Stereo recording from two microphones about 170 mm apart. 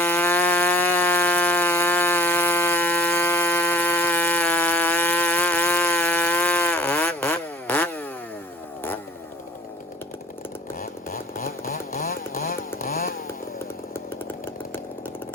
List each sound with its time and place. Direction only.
0.0 s insect: 10° left (ahead or behind)
10.8 s chainsaw: 55° left (ahead or behind)